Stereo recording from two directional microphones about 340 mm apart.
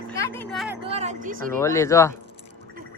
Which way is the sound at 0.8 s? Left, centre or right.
Centre.